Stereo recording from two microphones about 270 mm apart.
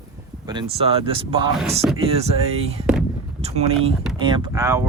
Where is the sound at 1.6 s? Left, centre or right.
Right.